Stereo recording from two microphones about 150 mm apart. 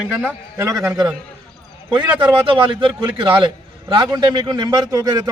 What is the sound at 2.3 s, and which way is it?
A man's voice, 35° right (ahead or behind).